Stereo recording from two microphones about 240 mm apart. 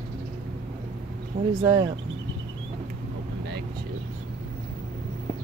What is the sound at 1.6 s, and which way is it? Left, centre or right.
Speech, centre.